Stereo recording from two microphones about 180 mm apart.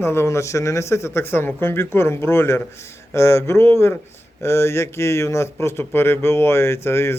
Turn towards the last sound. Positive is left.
turn(degrees=15)  # may be behind; listen again after turning